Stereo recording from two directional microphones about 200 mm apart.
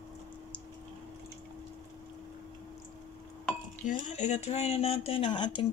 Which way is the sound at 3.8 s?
40° left (ahead or behind).